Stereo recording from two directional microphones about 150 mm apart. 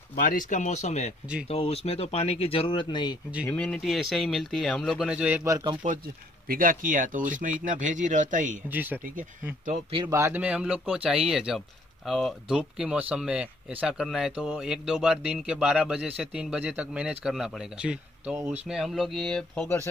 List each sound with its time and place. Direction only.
0.1 s speech: 65° left (ahead or behind); by 3.2 s 30° left (ahead or behind)
3.4 s a man's voice: 5° left (ahead or behind)
5.3 s a man's voice: 20° right (ahead or behind)
6.4 s speech: 70° right (ahead or behind)
8.6 s speech: 10° right (ahead or behind)
9.8 s speech: 35° right (ahead or behind)
10.1 s a man's voice: 20° right (ahead or behind)
10.4 s a man's voice: 10° right (ahead or behind)